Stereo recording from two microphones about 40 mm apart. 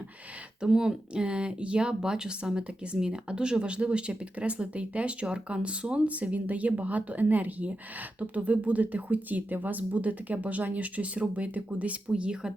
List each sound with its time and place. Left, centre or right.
0.6 s speech: centre